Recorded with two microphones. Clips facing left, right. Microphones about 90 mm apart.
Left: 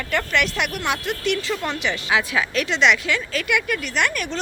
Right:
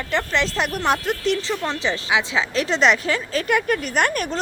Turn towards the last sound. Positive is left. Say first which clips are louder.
# right 2 dB
turn(degrees=-40)  # may be behind; listen again after turning